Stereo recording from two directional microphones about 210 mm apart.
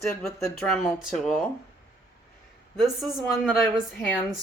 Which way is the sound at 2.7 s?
Centre (ahead or behind).